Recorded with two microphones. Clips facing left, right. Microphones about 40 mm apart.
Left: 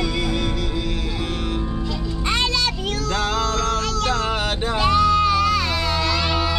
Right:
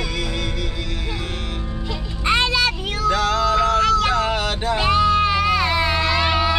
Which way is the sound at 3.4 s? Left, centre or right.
Centre.